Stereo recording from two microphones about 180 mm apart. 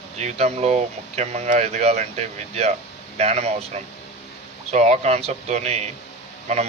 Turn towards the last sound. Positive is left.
turn(degrees=-40)  # may be behind; listen again after turning